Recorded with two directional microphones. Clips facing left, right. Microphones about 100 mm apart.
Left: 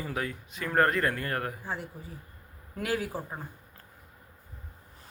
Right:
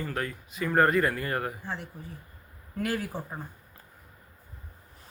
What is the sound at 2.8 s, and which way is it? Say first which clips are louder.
Speech: even; 5° left (ahead or behind).